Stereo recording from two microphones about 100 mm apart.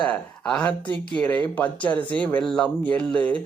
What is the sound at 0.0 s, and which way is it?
Speech, 10° left (ahead or behind).